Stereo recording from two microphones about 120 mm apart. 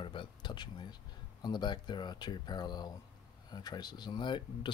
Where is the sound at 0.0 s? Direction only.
45° left (ahead or behind).